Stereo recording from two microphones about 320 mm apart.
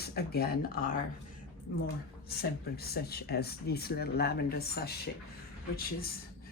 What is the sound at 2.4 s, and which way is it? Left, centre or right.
Speech, left.